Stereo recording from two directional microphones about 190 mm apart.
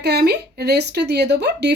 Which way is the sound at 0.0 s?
60° right (ahead or behind).